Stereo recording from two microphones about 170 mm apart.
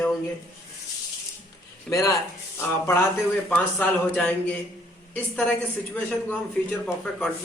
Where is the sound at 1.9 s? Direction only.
20° left (ahead or behind).